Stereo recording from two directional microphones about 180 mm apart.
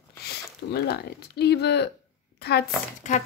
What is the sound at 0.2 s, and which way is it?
Speech, 65° left (ahead or behind).